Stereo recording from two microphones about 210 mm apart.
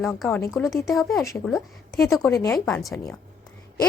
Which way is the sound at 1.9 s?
15° left (ahead or behind).